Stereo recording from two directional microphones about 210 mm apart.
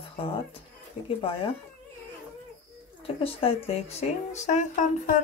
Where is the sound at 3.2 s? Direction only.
25° left (ahead or behind).